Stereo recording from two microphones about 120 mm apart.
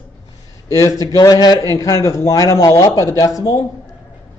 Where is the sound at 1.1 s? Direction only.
35° left (ahead or behind).